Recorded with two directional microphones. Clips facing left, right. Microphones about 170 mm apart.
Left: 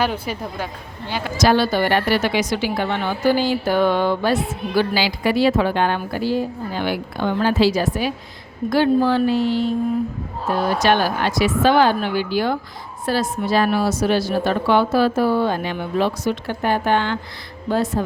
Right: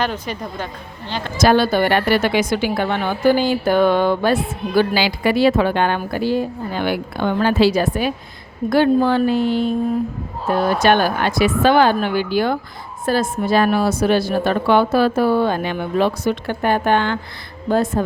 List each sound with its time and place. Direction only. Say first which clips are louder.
0.0 s speech: left 1 dB; 10° left (ahead or behind)
1.4 s a woman's voice: right 2 dB; 50° right (ahead or behind)
10.8 s a woman's voice: right 2 dB; 55° right (ahead or behind)